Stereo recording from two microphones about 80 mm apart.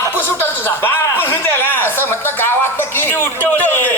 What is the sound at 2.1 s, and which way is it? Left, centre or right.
Speech, left.